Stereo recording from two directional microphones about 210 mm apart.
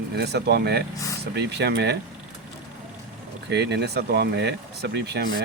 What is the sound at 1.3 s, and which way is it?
Speech, 55° right (ahead or behind).